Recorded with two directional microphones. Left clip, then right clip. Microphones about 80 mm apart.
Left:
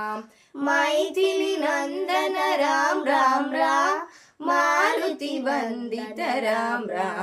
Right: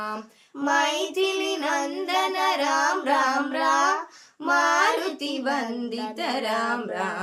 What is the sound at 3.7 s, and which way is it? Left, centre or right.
Speech, left.